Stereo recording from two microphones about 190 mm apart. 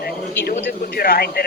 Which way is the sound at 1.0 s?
55° left (ahead or behind).